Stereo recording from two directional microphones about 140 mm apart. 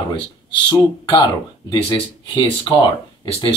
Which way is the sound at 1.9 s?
35° left (ahead or behind).